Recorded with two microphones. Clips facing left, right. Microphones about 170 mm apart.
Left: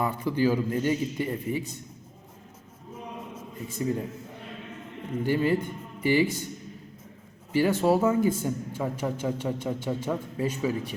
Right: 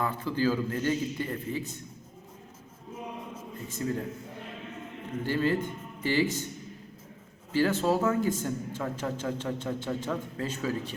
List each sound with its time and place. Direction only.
0.0 s a man's voice: 15° left (ahead or behind)
3.8 s a man's voice: 15° left (ahead or behind)
5.2 s a man's voice: 15° left (ahead or behind)
7.5 s a man's voice: 15° left (ahead or behind)